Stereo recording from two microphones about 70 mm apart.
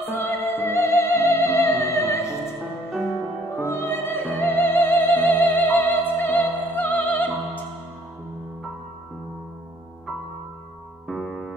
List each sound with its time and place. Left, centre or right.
0.0 s music: left
3.5 s music: left
11.1 s music: centre